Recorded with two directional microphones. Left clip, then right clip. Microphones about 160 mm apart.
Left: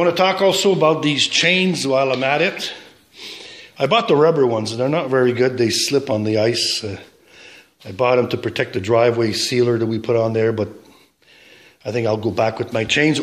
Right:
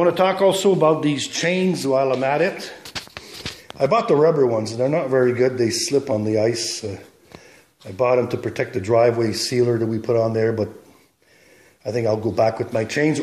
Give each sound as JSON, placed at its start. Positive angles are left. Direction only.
{"t": 0.0, "sound": "a man's voice", "side_deg": 10}
{"t": 3.9, "sound": "a man's voice", "side_deg": 15}
{"t": 4.7, "sound": "speech", "side_deg": 25}
{"t": 5.1, "sound": "a man's voice", "side_deg": 15}
{"t": 6.6, "sound": "speech", "side_deg": 40}
{"t": 7.9, "sound": "a man's voice", "side_deg": 20}
{"t": 11.8, "sound": "a man's voice", "side_deg": 10}